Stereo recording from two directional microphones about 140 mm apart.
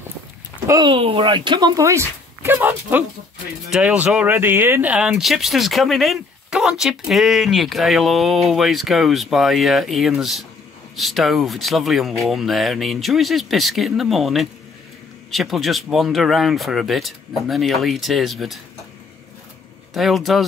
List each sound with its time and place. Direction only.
0.7 s speech: 30° right (ahead or behind)
0.9 s speech: 40° right (ahead or behind); by 18.6 s centre (ahead or behind)
19.9 s speech: centre (ahead or behind)